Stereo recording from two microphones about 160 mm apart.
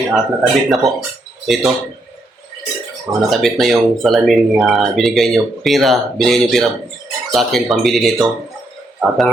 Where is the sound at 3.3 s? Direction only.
Centre (ahead or behind).